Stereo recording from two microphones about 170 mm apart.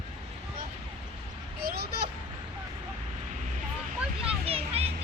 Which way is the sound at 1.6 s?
65° right (ahead or behind).